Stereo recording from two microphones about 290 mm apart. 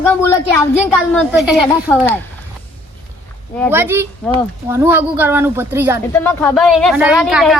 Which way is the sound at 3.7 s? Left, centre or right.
Centre.